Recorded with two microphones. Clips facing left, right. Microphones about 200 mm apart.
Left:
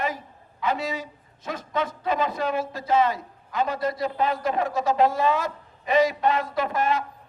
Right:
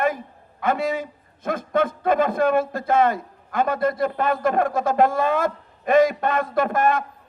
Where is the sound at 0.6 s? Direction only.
55° right (ahead or behind).